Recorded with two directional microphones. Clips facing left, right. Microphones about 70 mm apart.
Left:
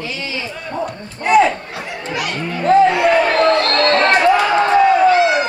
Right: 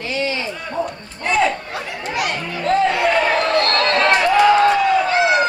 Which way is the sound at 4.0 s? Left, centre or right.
Left.